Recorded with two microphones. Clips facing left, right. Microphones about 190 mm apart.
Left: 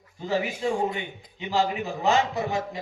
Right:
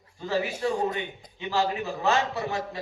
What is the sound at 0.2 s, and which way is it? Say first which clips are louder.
A man's voice: left 1 dB; 15° left (ahead or behind).